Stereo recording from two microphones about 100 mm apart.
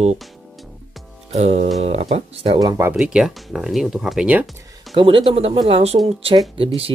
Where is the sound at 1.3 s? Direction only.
90° right.